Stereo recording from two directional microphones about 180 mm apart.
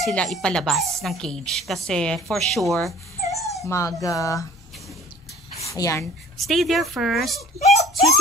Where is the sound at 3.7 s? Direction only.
15° left (ahead or behind).